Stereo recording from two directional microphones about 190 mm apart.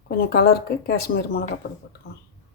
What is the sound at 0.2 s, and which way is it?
Speech, 55° left (ahead or behind).